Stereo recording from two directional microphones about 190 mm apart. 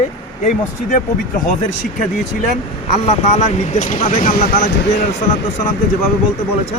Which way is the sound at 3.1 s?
35° left (ahead or behind).